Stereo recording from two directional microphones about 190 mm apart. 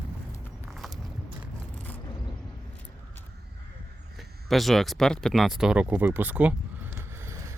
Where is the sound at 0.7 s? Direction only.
Centre (ahead or behind).